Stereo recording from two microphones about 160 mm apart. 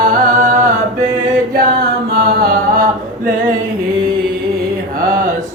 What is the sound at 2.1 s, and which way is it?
Music, 75° right (ahead or behind).